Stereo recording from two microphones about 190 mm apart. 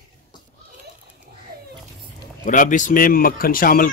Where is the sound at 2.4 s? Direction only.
45° left (ahead or behind).